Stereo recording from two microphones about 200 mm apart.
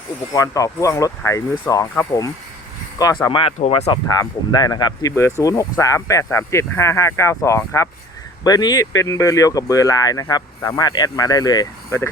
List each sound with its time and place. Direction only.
0.3 s speech: 15° left (ahead or behind)
3.2 s speech: 25° left (ahead or behind)